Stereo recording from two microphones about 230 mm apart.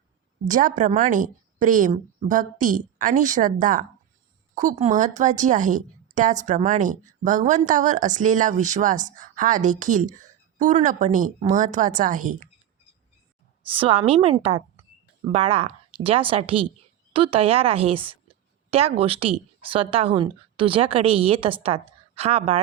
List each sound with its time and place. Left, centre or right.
0.4 s a woman's voice: right
13.7 s a woman's voice: right